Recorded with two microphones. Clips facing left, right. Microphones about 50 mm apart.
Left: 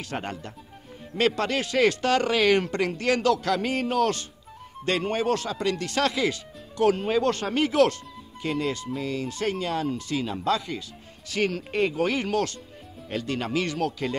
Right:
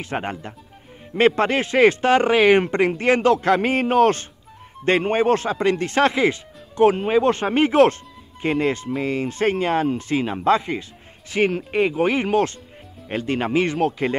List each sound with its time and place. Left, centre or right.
0.0 s speech: right